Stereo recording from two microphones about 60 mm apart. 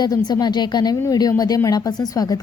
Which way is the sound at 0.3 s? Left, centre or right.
Left.